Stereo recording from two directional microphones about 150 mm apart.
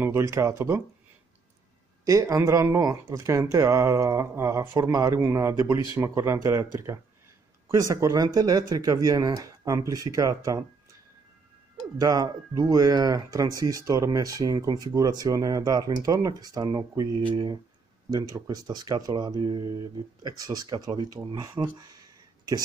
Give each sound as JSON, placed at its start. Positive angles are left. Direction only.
{"t": 0.0, "sound": "speech", "side_deg": -20}
{"t": 2.0, "sound": "speech", "side_deg": -20}
{"t": 12.0, "sound": "speech", "side_deg": -25}